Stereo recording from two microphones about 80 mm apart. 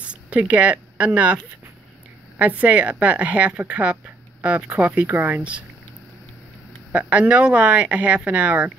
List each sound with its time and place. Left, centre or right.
0.1 s speech: centre
2.6 s speech: centre
6.9 s speech: centre